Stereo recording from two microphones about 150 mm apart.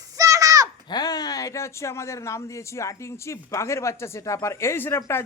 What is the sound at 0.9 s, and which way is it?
Speech, 25° left (ahead or behind).